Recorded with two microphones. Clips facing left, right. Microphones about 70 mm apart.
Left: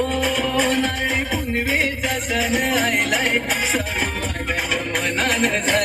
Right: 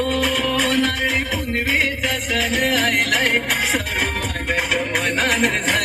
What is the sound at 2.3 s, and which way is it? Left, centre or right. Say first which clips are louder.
Music: even; left.